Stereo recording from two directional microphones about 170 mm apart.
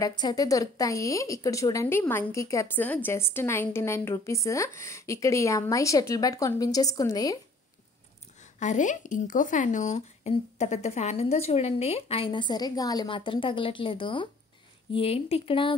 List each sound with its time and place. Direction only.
0.0 s speech: 25° left (ahead or behind)
8.5 s a woman's voice: 45° left (ahead or behind)